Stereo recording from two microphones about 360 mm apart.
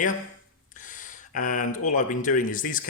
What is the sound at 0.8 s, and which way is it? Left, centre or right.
Speech, left.